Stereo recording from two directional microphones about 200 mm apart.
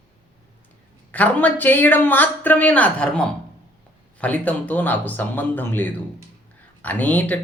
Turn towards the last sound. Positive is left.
turn(degrees=10)  # may be behind; listen again after turning